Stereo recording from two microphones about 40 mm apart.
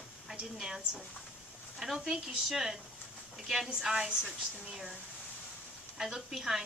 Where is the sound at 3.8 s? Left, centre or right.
Centre.